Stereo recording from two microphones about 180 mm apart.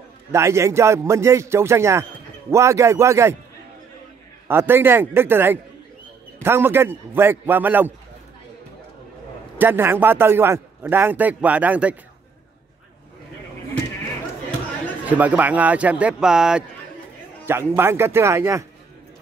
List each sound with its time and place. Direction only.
0.3 s a man's voice: 15° right (ahead or behind)
4.5 s a man's voice: 10° right (ahead or behind)
9.6 s a man's voice: 10° right (ahead or behind)
15.0 s a man's voice: 10° right (ahead or behind)